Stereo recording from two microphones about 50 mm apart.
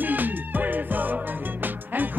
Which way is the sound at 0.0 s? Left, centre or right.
Right.